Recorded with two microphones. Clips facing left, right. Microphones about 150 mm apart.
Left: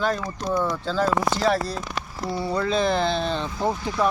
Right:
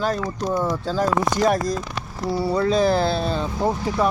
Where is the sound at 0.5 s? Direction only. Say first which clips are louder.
Even; 15° right (ahead or behind).